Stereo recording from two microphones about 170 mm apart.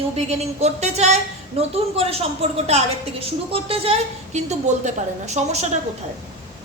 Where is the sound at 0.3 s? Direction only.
40° right (ahead or behind).